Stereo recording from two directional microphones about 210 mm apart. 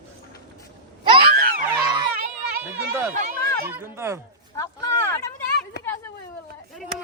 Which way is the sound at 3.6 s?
10° right (ahead or behind).